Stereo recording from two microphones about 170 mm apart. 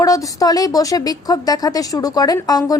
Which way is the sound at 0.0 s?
20° left (ahead or behind).